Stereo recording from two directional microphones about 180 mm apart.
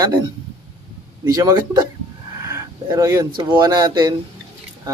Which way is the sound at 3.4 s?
25° right (ahead or behind).